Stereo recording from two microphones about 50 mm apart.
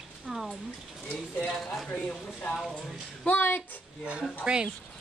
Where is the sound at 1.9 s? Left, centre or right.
Left.